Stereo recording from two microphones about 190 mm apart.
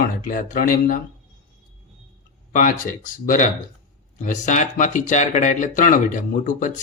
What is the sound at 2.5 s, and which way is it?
Speech, 45° left (ahead or behind).